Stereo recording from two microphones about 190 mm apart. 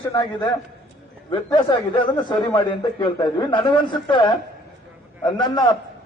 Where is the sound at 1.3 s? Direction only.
25° left (ahead or behind).